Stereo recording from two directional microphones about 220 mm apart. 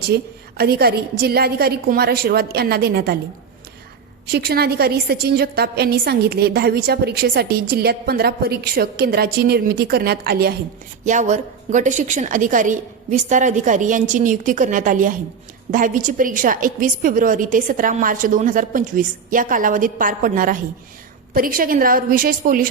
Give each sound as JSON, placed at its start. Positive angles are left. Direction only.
{"t": 0.1, "sound": "a woman's voice", "side_deg": -45}
{"t": 4.3, "sound": "a woman's voice", "side_deg": -45}